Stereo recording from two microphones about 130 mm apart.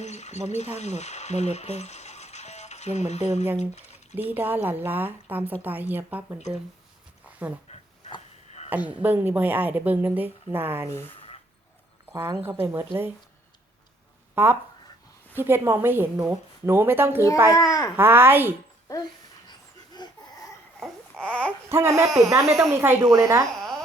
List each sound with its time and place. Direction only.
0.0 s speech: 60° left (ahead or behind)
4.1 s a woman's voice: 15° right (ahead or behind)
7.7 s a sound: 55° left (ahead or behind)
8.7 s a woman's voice: 10° right (ahead or behind)
12.1 s speech: 25° right (ahead or behind)
14.3 s a woman's voice: 15° right (ahead or behind)
17.5 s a child's voice: 25° left (ahead or behind)
17.9 s a woman's voice: 15° right (ahead or behind)
19.5 s dog: 35° left (ahead or behind)
20.7 s babbling: 5° left (ahead or behind)
21.7 s a woman's voice: 20° right (ahead or behind)
23.0 s speech: 30° right (ahead or behind)